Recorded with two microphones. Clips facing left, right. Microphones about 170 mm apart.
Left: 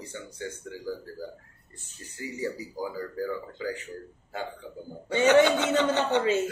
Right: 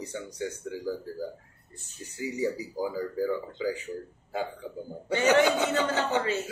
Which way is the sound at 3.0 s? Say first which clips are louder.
Right 4 dB; 10° right (ahead or behind).